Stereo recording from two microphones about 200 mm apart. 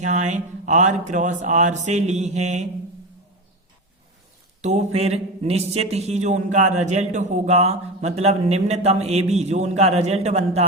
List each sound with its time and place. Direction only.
0.0 s speech: 35° right (ahead or behind)
4.6 s speech: 35° right (ahead or behind)